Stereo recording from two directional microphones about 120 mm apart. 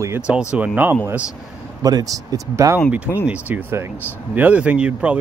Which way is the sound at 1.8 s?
30° right (ahead or behind).